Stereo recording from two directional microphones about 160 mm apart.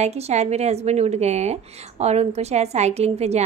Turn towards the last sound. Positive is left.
turn(degrees=-40)  # may be behind; listen again after turning